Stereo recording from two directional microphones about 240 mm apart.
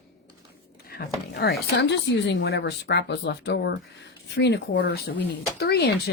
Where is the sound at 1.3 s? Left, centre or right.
Left.